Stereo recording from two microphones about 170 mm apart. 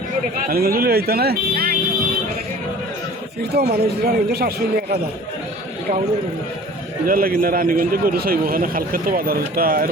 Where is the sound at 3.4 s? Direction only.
70° right (ahead or behind).